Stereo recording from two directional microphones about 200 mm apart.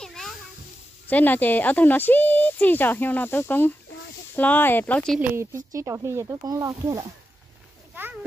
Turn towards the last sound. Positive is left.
turn(degrees=-15)  # may be behind; listen again after turning